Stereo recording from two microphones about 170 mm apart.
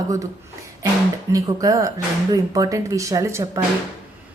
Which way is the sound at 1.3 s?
20° right (ahead or behind).